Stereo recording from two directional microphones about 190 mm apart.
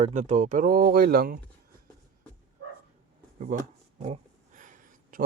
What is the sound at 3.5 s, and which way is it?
Speech, 40° right (ahead or behind).